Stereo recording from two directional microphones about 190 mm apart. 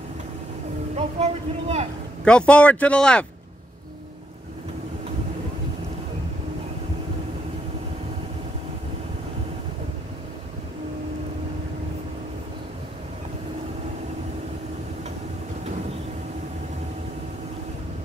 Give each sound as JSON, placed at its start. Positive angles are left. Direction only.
{"t": 0.9, "sound": "speech", "side_deg": -35}
{"t": 2.2, "sound": "speech", "side_deg": 5}